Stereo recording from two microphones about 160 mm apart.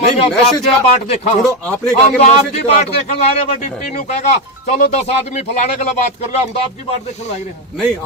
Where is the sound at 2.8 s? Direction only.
45° left (ahead or behind).